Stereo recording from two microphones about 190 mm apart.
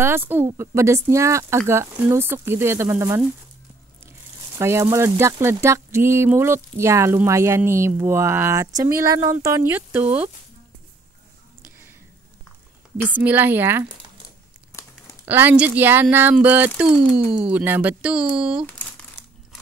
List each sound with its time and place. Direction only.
0.0 s speech: 10° right (ahead or behind)
4.6 s speech: 15° right (ahead or behind)
13.2 s speech: 10° right (ahead or behind)
15.2 s speech: 10° right (ahead or behind)